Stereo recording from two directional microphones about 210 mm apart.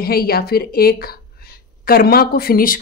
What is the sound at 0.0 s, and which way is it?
A woman's voice, 45° left (ahead or behind).